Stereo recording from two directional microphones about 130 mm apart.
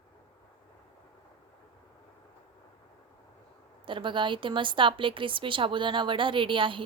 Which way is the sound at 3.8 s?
40° right (ahead or behind).